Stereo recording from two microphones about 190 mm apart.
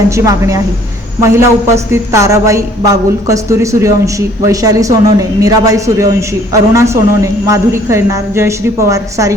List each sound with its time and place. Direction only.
0.3 s speech: 15° right (ahead or behind)